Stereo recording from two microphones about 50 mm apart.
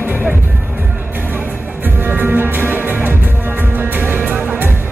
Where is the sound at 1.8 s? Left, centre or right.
Right.